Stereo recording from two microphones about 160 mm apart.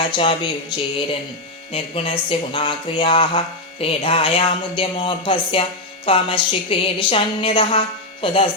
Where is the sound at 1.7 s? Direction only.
35° left (ahead or behind).